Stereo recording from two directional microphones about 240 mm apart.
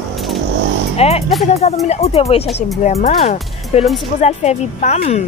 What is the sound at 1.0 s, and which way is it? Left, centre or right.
Speech, left.